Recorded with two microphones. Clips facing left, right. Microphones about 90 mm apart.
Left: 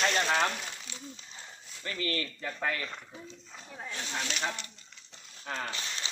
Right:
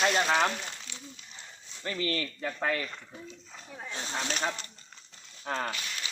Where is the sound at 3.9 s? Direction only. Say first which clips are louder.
Right 2 dB; 30° right (ahead or behind).